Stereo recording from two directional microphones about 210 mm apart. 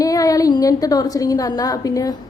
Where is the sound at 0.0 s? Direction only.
15° left (ahead or behind).